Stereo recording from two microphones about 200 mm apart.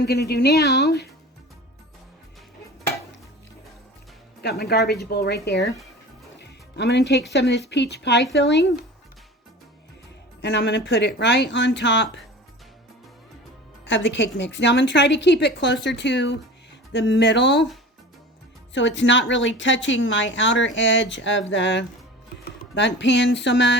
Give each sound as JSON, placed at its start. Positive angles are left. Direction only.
{"t": 0.0, "sound": "a woman's voice", "side_deg": 55}
{"t": 4.4, "sound": "music", "side_deg": 55}
{"t": 5.0, "sound": "a woman's voice", "side_deg": 55}
{"t": 6.7, "sound": "a woman's voice", "side_deg": 60}
{"t": 10.4, "sound": "a woman's voice", "side_deg": 60}
{"t": 13.8, "sound": "a woman's voice", "side_deg": 65}
{"t": 18.7, "sound": "a woman's voice", "side_deg": 65}